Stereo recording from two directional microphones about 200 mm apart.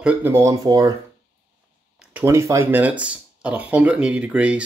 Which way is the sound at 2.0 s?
10° right (ahead or behind).